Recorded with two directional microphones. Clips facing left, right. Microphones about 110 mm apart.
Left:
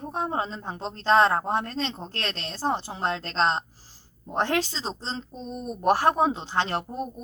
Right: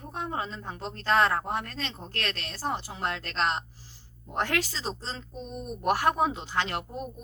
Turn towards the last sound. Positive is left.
turn(degrees=30)  # may be behind; listen again after turning